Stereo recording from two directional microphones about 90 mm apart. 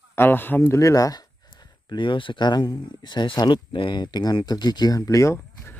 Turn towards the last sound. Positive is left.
turn(degrees=35)  # may be behind; listen again after turning